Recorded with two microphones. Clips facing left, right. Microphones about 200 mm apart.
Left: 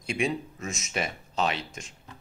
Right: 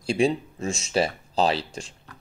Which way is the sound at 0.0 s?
30° right (ahead or behind).